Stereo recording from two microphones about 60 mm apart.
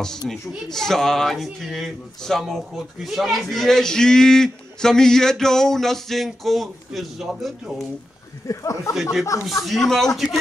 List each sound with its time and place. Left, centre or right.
0.2 s a man's voice: centre
8.5 s speech: left
9.7 s a man's voice: centre